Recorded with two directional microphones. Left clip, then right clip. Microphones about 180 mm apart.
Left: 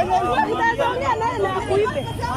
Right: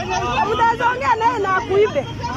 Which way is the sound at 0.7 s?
5° right (ahead or behind).